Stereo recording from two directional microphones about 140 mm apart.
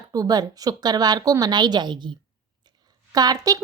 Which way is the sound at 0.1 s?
25° right (ahead or behind).